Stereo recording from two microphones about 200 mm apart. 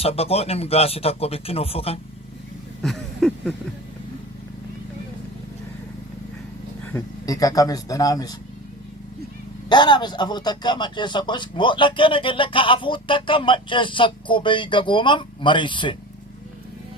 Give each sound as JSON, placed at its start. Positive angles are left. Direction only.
{"t": 0.0, "sound": "a man's voice", "side_deg": 30}
{"t": 2.8, "sound": "a sound", "side_deg": 0}
{"t": 6.9, "sound": "speech", "side_deg": 15}
{"t": 9.6, "sound": "a man's voice", "side_deg": 20}